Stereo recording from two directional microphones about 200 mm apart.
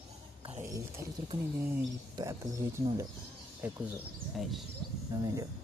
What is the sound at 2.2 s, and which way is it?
Speech, 20° right (ahead or behind).